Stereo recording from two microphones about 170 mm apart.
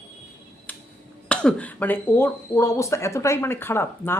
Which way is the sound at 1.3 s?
5° left (ahead or behind).